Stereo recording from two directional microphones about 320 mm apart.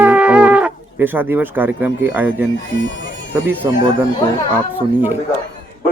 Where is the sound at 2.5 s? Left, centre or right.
Left.